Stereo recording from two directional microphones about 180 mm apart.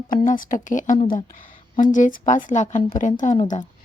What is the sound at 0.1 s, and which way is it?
A woman's voice, 50° left (ahead or behind).